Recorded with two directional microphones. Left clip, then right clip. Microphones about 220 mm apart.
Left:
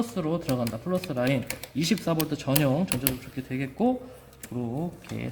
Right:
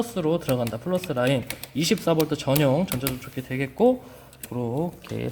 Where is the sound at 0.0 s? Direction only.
35° right (ahead or behind).